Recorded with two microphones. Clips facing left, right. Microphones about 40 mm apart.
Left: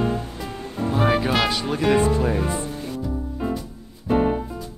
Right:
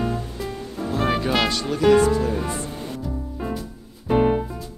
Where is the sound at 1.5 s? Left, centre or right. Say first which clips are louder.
Right 3 dB; centre.